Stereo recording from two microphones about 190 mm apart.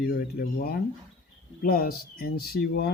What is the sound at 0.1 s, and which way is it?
Speech, 60° left (ahead or behind).